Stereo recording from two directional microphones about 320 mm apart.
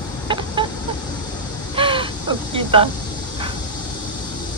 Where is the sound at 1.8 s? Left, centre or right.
Centre.